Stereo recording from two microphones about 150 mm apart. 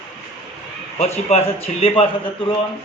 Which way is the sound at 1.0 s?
45° left (ahead or behind).